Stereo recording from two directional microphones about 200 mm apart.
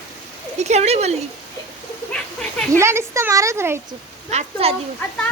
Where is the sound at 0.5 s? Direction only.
35° right (ahead or behind).